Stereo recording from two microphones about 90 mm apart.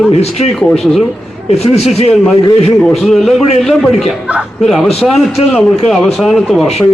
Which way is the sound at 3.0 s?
Centre (ahead or behind).